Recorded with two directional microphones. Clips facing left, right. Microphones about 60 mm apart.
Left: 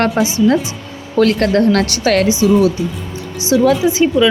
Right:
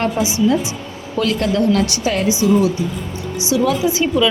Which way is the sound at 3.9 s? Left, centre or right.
Left.